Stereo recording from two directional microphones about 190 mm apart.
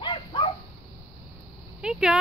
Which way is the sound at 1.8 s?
5° right (ahead or behind).